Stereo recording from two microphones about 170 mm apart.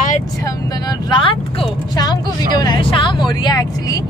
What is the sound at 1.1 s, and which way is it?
Speech, 30° left (ahead or behind).